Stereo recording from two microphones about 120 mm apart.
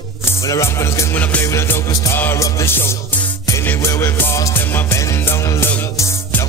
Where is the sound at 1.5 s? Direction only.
25° left (ahead or behind).